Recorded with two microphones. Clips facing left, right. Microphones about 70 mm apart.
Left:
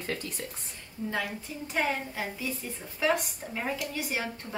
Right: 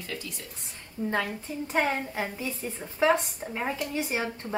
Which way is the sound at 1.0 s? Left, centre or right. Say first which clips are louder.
Right 4 dB; right.